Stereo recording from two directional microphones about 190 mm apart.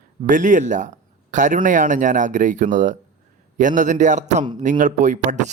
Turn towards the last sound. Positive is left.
turn(degrees=-40)  # may be behind; listen again after turning